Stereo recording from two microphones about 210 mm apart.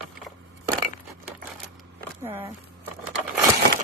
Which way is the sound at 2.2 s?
10° right (ahead or behind).